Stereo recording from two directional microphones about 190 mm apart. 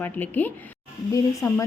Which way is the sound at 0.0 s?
10° left (ahead or behind).